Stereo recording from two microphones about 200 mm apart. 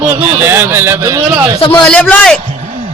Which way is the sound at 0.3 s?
10° right (ahead or behind).